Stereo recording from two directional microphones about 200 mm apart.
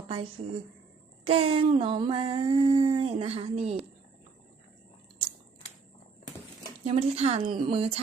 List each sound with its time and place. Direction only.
0.4 s speech: 30° right (ahead or behind)
1.2 s a sound: 30° right (ahead or behind)
6.8 s speech: 30° right (ahead or behind)